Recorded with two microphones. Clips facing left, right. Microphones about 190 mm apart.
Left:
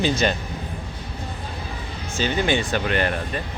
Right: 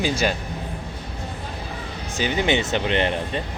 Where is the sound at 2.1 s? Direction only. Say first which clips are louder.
Even; 15° right (ahead or behind).